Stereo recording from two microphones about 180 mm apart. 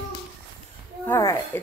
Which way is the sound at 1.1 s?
15° left (ahead or behind).